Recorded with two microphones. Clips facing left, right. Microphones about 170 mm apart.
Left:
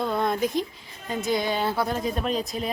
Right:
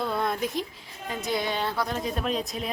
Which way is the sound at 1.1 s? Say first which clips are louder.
Left 3 dB; centre (ahead or behind).